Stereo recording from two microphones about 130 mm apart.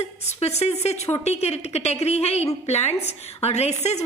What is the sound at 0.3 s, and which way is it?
A woman's voice, 55° left (ahead or behind).